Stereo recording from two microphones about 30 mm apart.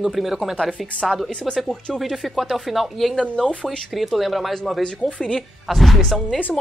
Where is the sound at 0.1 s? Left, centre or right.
Centre.